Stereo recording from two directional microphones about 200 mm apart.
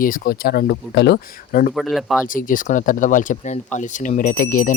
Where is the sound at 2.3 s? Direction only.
45° left (ahead or behind).